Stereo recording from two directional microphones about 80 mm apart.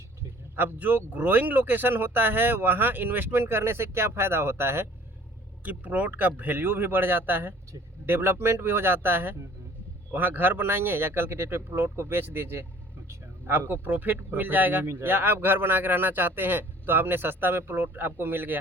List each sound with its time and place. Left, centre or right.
0.5 s speech: right
5.6 s speech: right